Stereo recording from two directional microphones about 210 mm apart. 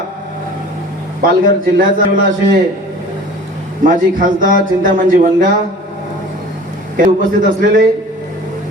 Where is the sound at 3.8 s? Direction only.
40° right (ahead or behind).